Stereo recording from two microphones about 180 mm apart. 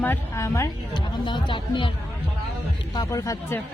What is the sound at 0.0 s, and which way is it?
Speech, 15° left (ahead or behind).